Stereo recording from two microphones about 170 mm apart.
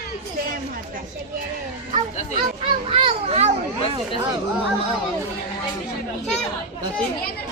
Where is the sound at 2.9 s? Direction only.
35° right (ahead or behind).